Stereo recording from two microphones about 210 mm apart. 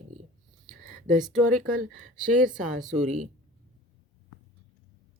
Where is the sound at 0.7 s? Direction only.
40° right (ahead or behind).